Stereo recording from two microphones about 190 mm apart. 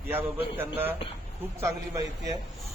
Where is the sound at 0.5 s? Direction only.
10° right (ahead or behind).